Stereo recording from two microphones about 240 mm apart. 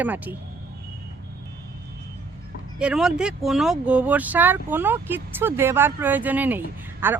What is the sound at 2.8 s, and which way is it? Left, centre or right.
Speech, centre.